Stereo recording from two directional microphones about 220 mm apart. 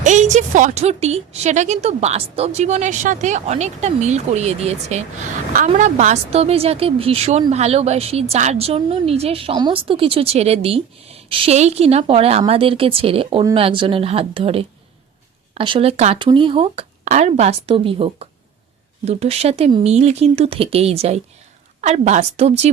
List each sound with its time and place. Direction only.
0.0 s a woman's voice: 35° right (ahead or behind)